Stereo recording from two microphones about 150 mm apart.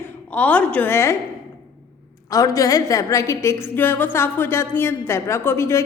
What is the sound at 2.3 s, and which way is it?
A woman's voice, 25° left (ahead or behind).